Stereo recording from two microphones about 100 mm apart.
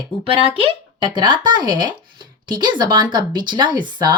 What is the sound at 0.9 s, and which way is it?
A woman's voice, 50° right (ahead or behind).